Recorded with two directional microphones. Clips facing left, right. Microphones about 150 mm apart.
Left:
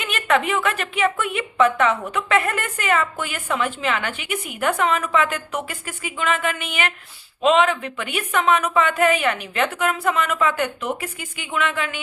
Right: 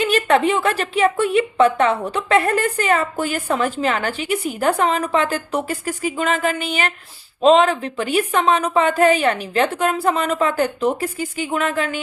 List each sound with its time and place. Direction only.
0.0 s a woman's voice: 35° right (ahead or behind)